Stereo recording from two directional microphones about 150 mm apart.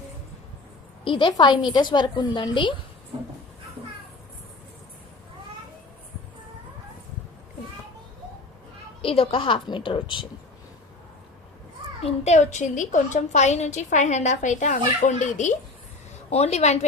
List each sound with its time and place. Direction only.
1.0 s a woman's voice: 35° left (ahead or behind)
9.0 s a woman's voice: 40° left (ahead or behind)
12.0 s a woman's voice: 50° left (ahead or behind)